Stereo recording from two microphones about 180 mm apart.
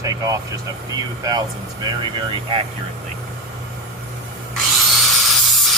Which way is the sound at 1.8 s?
25° right (ahead or behind).